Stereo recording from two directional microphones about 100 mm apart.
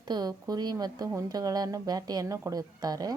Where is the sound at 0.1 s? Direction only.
40° right (ahead or behind).